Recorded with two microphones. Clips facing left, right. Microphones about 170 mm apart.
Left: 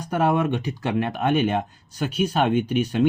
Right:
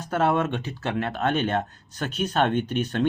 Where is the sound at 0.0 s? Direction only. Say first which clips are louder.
Left 2 dB; 15° left (ahead or behind).